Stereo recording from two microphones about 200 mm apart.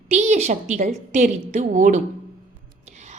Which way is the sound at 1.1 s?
35° right (ahead or behind).